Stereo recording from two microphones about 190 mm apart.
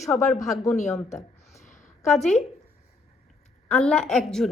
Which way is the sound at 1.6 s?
40° left (ahead or behind).